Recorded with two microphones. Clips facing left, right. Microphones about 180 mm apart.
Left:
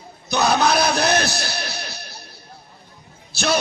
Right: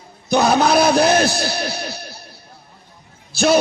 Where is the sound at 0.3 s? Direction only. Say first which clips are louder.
Right 4 dB; 45° right (ahead or behind).